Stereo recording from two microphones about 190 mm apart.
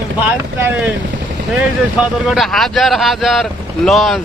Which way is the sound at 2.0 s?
5° right (ahead or behind).